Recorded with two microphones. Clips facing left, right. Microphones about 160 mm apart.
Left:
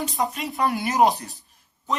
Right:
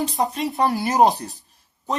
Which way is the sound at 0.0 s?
35° right (ahead or behind).